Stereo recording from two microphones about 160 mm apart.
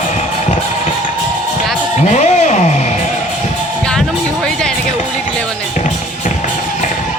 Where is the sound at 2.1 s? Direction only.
45° left (ahead or behind).